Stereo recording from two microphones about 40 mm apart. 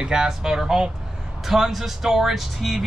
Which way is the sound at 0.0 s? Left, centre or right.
Centre.